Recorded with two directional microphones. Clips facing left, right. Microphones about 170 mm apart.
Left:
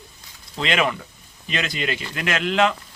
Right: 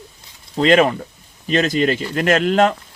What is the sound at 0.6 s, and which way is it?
Speech, 40° right (ahead or behind).